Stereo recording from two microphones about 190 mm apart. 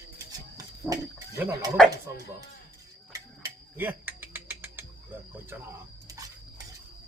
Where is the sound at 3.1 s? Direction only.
15° right (ahead or behind).